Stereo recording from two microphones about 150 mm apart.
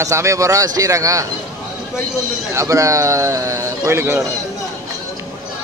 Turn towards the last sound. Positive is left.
turn(degrees=-15)  # may be behind; listen again after turning